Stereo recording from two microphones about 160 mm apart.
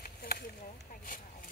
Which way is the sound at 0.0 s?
70° left (ahead or behind).